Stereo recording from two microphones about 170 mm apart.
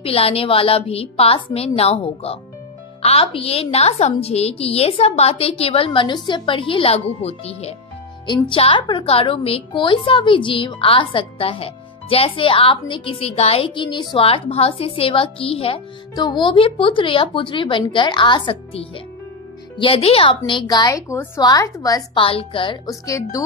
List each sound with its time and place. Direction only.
0.0 s a woman's voice: 35° left (ahead or behind); by 23.4 s 20° left (ahead or behind)